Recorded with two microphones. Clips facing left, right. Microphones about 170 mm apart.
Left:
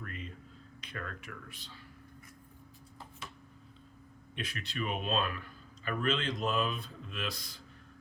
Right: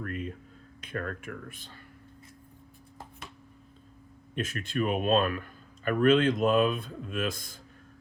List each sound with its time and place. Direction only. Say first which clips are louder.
0.0 s a sound: right 9 dB; 50° right (ahead or behind)
0.8 s speech: right 8 dB; 50° right (ahead or behind)
4.4 s speech: right 8 dB; 45° right (ahead or behind)